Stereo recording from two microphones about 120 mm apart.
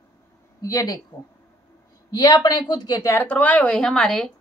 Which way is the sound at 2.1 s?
35° left (ahead or behind).